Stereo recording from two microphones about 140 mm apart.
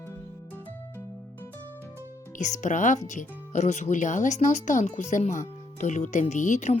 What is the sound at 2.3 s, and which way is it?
Speech, 60° left (ahead or behind).